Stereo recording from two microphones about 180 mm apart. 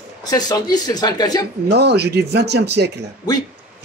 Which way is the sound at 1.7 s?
65° right (ahead or behind).